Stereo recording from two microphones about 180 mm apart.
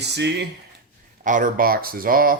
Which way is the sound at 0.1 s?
70° right (ahead or behind).